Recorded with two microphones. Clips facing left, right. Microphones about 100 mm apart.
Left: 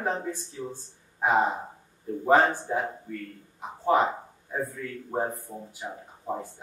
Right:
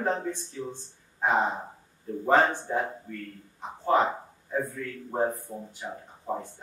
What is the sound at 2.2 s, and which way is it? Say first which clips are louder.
Speech: left 1 dB; 10° left (ahead or behind).